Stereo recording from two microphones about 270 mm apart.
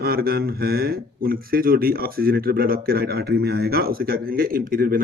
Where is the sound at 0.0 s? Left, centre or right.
Right.